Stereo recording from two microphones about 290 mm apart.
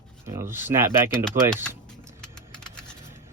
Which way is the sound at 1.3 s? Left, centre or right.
Right.